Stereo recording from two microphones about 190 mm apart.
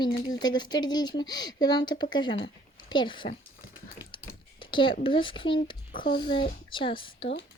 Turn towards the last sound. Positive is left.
turn(degrees=25)  # may be behind; listen again after turning